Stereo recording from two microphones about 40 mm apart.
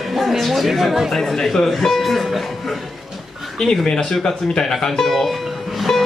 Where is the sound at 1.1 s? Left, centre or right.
Centre.